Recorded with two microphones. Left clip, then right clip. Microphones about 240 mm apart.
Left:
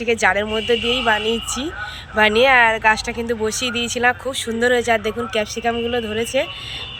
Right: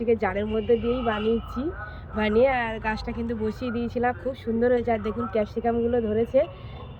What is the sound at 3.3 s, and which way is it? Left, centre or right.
Speech, left.